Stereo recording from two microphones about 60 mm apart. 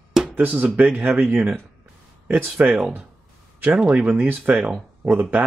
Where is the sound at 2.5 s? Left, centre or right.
Centre.